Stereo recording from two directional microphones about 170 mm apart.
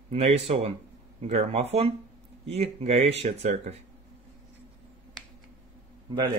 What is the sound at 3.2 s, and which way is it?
Speech, 45° right (ahead or behind).